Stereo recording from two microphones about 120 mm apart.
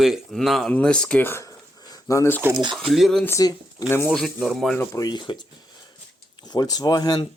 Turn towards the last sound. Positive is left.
turn(degrees=35)  # may be behind; listen again after turning